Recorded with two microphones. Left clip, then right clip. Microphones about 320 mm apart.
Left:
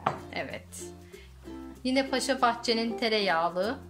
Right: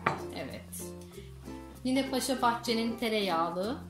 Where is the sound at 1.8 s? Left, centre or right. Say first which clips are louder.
Left 3 dB; left.